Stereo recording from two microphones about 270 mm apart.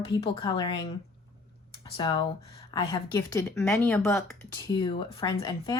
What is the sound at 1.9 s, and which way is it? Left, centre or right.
Speech, centre.